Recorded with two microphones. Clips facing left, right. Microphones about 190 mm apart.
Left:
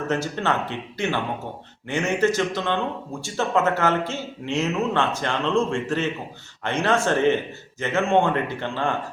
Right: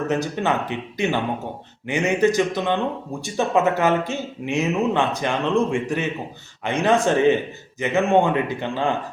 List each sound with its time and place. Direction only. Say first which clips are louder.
0.1 s speech: even; 15° right (ahead or behind)